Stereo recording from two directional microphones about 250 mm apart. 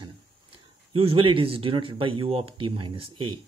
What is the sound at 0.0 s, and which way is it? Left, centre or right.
Speech, right.